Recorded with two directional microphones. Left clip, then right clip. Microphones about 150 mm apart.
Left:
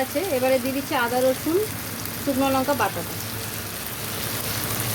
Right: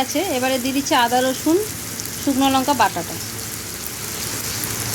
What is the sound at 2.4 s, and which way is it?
Speech, 90° right.